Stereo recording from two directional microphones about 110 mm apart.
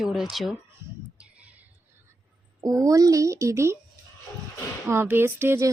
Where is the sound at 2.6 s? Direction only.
30° right (ahead or behind).